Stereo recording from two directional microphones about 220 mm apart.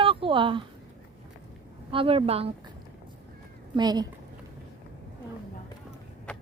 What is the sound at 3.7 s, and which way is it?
Speech, 20° right (ahead or behind).